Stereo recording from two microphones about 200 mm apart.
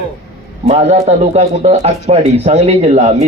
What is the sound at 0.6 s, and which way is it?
A man's voice, 35° right (ahead or behind).